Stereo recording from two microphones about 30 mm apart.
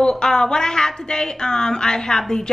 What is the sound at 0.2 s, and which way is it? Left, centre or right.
A woman's voice, left.